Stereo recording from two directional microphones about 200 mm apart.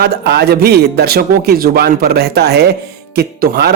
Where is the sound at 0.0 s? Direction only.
55° right (ahead or behind).